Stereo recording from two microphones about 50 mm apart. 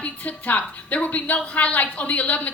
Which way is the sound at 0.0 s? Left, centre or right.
Left.